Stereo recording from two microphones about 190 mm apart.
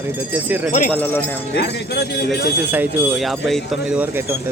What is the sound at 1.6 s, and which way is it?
Speech, 60° left (ahead or behind).